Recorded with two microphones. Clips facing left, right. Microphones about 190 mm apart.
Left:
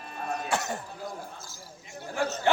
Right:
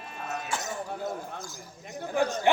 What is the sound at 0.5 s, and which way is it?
Throat clearing, 65° left (ahead or behind).